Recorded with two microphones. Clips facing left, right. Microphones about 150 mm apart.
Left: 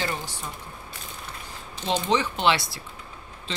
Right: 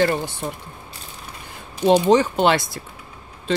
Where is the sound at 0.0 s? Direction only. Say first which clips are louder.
Right 11 dB; 55° right (ahead or behind).